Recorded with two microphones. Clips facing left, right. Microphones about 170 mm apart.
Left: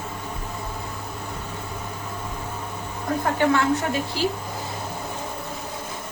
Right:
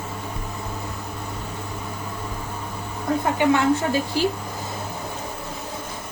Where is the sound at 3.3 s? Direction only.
15° right (ahead or behind).